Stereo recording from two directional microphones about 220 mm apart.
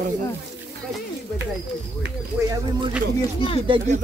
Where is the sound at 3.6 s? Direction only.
25° right (ahead or behind).